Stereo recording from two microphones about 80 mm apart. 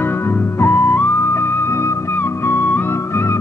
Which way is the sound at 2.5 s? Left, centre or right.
Left.